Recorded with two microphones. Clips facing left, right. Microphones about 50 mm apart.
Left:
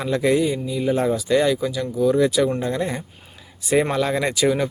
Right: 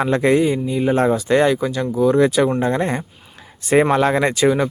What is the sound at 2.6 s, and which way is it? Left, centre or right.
Speech, right.